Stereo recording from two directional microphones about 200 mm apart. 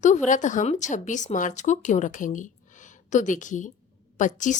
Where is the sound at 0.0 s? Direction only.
35° left (ahead or behind).